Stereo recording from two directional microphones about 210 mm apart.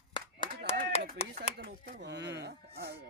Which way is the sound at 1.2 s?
30° left (ahead or behind).